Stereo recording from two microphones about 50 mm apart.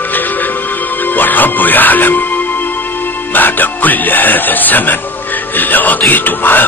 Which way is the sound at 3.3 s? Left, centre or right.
Left.